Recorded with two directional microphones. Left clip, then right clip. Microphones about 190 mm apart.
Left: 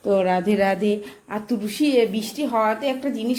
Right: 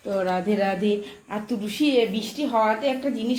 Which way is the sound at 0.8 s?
20° left (ahead or behind).